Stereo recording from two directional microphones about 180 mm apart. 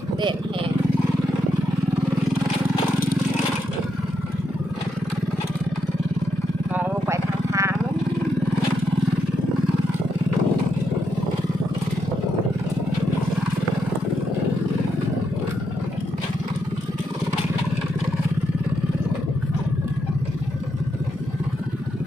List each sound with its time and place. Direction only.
6.7 s vehicle: 15° right (ahead or behind)